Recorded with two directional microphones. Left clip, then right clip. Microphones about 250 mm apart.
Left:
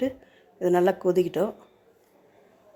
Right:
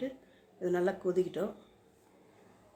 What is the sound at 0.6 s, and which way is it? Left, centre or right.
Speech, left.